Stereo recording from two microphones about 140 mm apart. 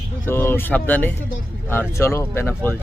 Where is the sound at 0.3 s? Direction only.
15° left (ahead or behind).